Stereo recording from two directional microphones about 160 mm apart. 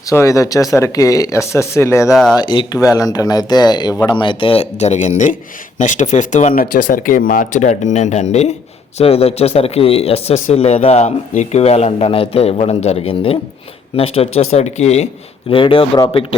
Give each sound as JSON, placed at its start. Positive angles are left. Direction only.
{"t": 0.1, "sound": "speech", "side_deg": 20}